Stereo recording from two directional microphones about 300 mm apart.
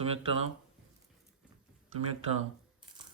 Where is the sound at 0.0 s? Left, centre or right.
Centre.